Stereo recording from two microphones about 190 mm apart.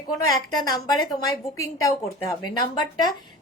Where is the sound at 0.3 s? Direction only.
20° left (ahead or behind).